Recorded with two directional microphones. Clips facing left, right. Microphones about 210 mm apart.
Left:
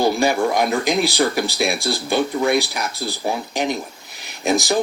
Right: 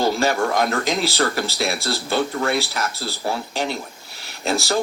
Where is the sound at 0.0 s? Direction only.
15° left (ahead or behind).